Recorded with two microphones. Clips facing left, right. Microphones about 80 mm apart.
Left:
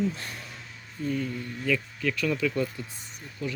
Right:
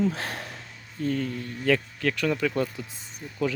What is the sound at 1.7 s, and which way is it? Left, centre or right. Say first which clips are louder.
Speech: right 4 dB; right.